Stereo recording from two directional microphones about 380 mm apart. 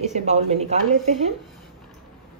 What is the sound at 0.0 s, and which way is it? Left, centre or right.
A woman's voice, centre.